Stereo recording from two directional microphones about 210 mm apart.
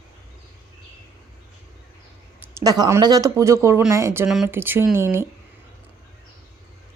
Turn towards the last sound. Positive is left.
turn(degrees=-10)  # may be behind; listen again after turning